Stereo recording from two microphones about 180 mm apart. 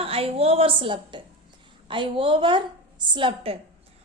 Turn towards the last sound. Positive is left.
turn(degrees=-30)  # may be behind; listen again after turning